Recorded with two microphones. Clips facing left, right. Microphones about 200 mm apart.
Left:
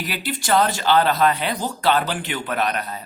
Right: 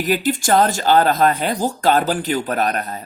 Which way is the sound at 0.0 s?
45° right (ahead or behind).